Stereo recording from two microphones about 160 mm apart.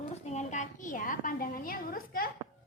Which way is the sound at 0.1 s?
45° left (ahead or behind).